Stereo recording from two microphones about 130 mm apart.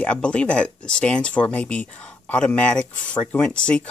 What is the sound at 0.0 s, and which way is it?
Speech, 10° left (ahead or behind).